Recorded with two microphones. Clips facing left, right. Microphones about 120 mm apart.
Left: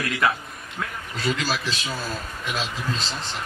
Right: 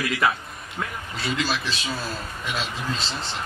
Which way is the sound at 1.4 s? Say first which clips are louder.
Even; 40° left (ahead or behind).